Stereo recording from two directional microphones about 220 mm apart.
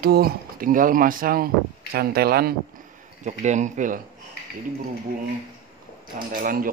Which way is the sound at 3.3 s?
35° right (ahead or behind).